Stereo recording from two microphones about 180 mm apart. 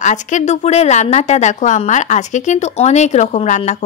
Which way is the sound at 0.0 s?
40° left (ahead or behind).